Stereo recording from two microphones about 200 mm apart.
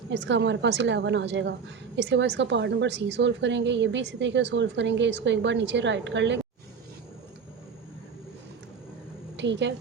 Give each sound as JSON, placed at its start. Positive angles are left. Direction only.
{"t": 0.1, "sound": "a woman's voice", "side_deg": -60}
{"t": 9.4, "sound": "a woman's voice", "side_deg": -60}